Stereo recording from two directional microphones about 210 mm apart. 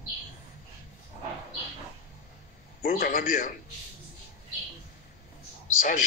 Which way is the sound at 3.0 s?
40° left (ahead or behind).